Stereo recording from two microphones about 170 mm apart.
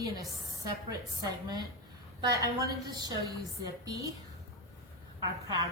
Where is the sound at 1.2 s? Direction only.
25° right (ahead or behind).